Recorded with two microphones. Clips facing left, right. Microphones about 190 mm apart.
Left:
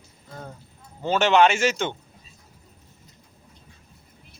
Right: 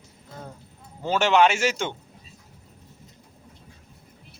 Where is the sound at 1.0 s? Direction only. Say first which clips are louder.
Left 1 dB; 10° right (ahead or behind).